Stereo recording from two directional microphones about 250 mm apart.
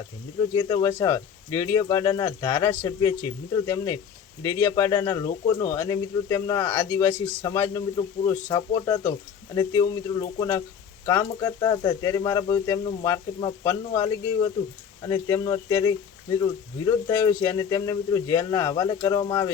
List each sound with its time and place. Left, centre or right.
0.5 s speech: centre